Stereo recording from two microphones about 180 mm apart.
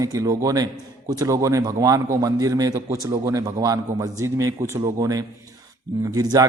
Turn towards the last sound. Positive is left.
turn(degrees=-20)  # may be behind; listen again after turning